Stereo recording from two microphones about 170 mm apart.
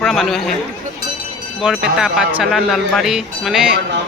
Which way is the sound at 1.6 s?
5° right (ahead or behind).